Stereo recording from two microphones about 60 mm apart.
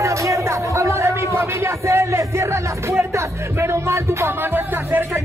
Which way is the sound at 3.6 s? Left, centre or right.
Right.